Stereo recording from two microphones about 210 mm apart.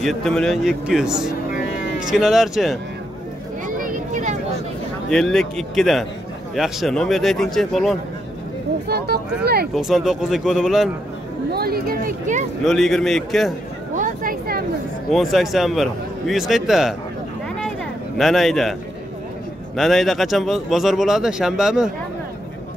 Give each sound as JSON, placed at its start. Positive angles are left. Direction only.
{"t": 0.0, "sound": "speech", "side_deg": 5}
{"t": 3.6, "sound": "a sound", "side_deg": -40}
{"t": 5.1, "sound": "speech", "side_deg": 0}
{"t": 8.8, "sound": "speech", "side_deg": -50}
{"t": 9.8, "sound": "speech", "side_deg": 0}
{"t": 11.5, "sound": "speech", "side_deg": -45}
{"t": 12.6, "sound": "speech", "side_deg": 0}
{"t": 13.9, "sound": "a sound", "side_deg": -40}
{"t": 15.0, "sound": "speech", "side_deg": 0}
{"t": 17.6, "sound": "a sound", "side_deg": 0}
{"t": 19.8, "sound": "speech", "side_deg": 0}